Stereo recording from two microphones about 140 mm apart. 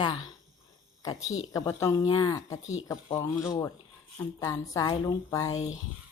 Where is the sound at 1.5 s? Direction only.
20° left (ahead or behind).